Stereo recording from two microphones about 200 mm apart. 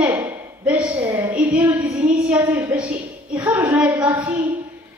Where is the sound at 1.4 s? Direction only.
10° right (ahead or behind).